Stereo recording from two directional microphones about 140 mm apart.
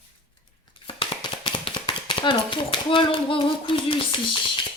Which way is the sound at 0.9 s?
35° left (ahead or behind).